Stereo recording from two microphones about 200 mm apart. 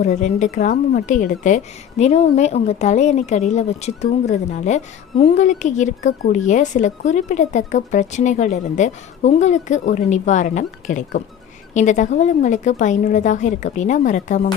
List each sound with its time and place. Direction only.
0.0 s speech: 35° left (ahead or behind)